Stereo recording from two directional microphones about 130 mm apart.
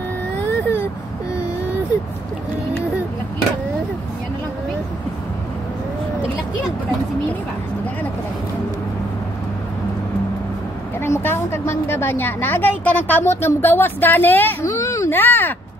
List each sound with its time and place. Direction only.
0.4 s baby cry: 15° left (ahead or behind)
11.0 s a woman's voice: 20° left (ahead or behind)